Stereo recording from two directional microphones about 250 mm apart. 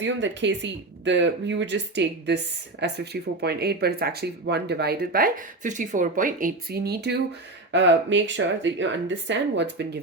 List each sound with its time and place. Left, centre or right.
0.0 s speech: right